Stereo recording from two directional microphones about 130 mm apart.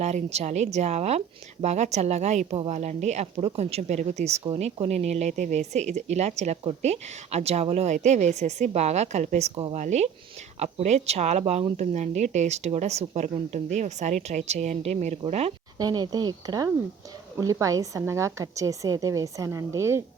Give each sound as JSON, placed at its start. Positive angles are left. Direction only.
{"t": 0.0, "sound": "a woman's voice", "side_deg": -55}
{"t": 15.8, "sound": "a woman's voice", "side_deg": -30}